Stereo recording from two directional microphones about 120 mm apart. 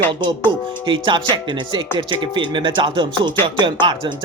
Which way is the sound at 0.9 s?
45° right (ahead or behind).